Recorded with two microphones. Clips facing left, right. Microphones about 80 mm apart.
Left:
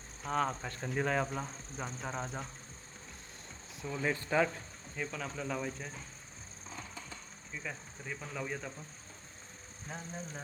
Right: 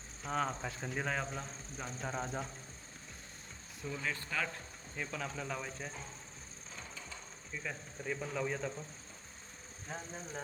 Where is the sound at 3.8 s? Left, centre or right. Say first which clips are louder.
Left 3 dB; centre.